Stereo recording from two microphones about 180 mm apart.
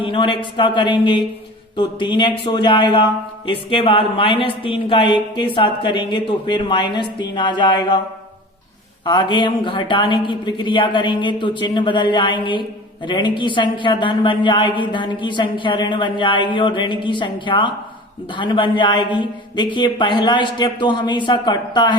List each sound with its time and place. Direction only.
0.0 s speech: 30° left (ahead or behind)
9.0 s speech: 25° left (ahead or behind)